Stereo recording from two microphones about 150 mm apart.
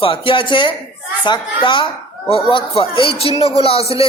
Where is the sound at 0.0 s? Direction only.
35° left (ahead or behind).